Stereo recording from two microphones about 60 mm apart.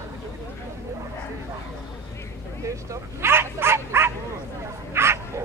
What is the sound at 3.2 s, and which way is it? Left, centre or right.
Dog, right.